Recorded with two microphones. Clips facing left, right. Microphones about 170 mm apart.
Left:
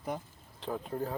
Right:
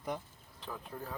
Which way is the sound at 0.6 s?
35° left (ahead or behind).